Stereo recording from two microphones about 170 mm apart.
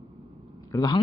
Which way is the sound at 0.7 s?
25° left (ahead or behind).